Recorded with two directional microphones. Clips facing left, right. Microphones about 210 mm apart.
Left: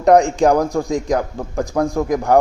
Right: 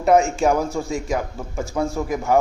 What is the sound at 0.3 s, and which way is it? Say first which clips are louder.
Speech: left 5 dB; 15° left (ahead or behind).